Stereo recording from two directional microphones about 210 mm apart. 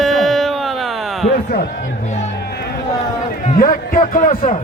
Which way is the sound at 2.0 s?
35° left (ahead or behind).